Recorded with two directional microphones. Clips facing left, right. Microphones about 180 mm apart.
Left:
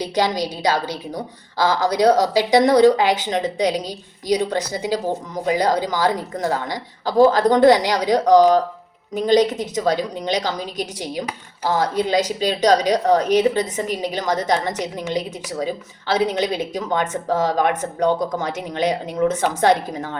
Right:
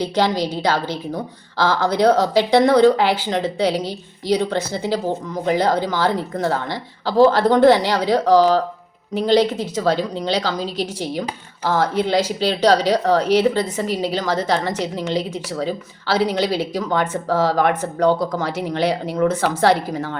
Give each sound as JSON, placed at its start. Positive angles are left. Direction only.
{"t": 0.0, "sound": "a woman's voice", "side_deg": 15}
{"t": 7.3, "sound": "a woman's voice", "side_deg": 40}
{"t": 7.5, "sound": "a woman's voice", "side_deg": 15}